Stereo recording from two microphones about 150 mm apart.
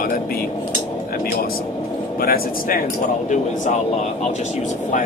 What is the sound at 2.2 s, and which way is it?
Speech, 80° left.